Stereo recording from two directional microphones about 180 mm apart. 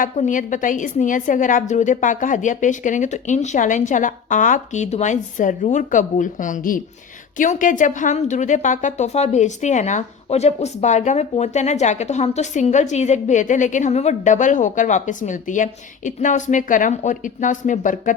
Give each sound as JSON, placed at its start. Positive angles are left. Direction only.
{"t": 0.0, "sound": "a woman's voice", "side_deg": 45}